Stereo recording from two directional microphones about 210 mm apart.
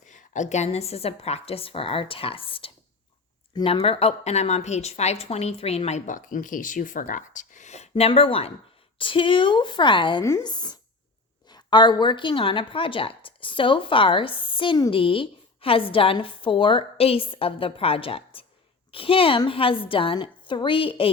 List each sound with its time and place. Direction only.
0.0 s a woman's voice: 35° left (ahead or behind)